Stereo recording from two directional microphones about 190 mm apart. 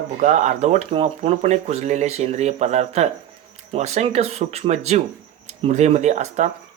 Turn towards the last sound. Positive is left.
turn(degrees=-35)  # may be behind; listen again after turning